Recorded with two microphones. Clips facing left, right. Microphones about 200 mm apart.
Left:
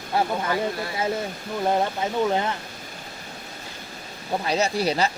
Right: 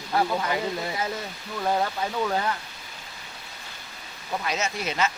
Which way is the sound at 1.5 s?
25° left (ahead or behind).